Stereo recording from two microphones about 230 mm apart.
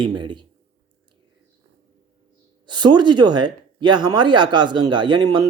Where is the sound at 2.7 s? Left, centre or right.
Centre.